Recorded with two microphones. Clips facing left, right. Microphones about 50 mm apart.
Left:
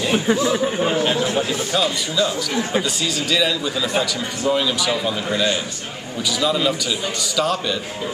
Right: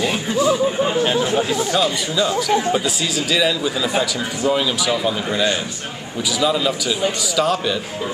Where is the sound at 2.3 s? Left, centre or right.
Right.